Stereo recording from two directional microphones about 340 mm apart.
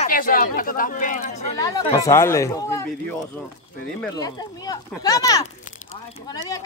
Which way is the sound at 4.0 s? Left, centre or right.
Centre.